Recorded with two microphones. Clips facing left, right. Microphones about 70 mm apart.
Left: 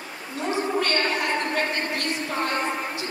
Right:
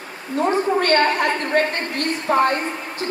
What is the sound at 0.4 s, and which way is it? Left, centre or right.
A woman's voice, right.